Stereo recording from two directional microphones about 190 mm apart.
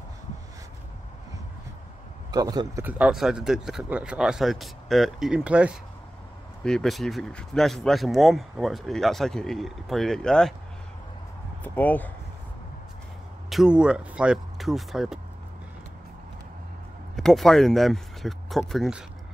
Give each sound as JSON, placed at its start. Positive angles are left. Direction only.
{"t": 2.3, "sound": "a man's voice", "side_deg": -20}
{"t": 2.8, "sound": "speech", "side_deg": -5}
{"t": 11.6, "sound": "speech", "side_deg": 10}
{"t": 13.5, "sound": "speech", "side_deg": -5}
{"t": 17.1, "sound": "speech", "side_deg": 0}